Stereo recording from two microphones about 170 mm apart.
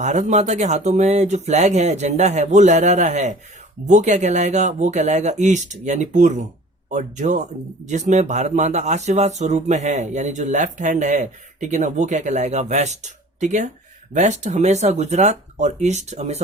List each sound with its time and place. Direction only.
0.0 s speech: 45° right (ahead or behind)